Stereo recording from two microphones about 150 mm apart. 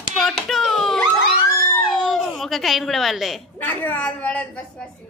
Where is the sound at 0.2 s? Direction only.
Centre (ahead or behind).